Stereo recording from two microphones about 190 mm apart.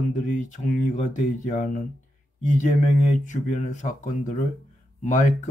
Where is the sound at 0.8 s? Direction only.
40° left (ahead or behind).